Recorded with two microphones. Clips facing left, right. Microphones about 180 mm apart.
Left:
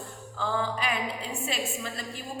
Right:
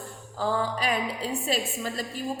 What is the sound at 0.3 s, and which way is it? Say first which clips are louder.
A woman's voice: right 3 dB; 40° right (ahead or behind).